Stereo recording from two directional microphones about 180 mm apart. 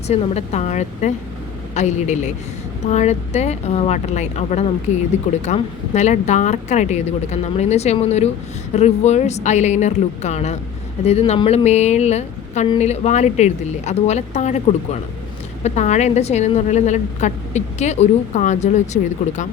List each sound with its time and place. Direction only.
0.1 s a woman's voice: 40° left (ahead or behind)